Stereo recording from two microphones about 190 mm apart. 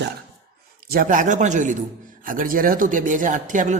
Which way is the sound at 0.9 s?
45° right (ahead or behind).